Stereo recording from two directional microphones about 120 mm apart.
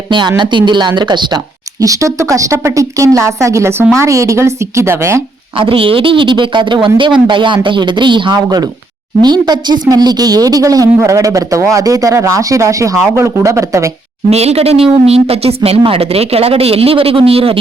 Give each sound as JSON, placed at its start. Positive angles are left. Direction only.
{"t": 0.1, "sound": "speech", "side_deg": -40}
{"t": 1.8, "sound": "a woman's voice", "side_deg": -25}
{"t": 5.5, "sound": "a woman's voice", "side_deg": -50}
{"t": 14.3, "sound": "speech", "side_deg": -60}